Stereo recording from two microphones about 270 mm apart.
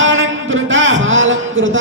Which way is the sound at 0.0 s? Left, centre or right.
Right.